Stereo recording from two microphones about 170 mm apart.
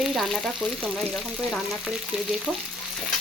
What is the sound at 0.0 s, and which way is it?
Frying, centre (ahead or behind).